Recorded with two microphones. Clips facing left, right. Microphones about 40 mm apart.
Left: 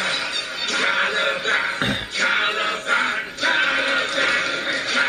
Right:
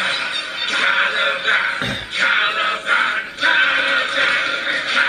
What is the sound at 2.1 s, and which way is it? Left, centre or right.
Music, right.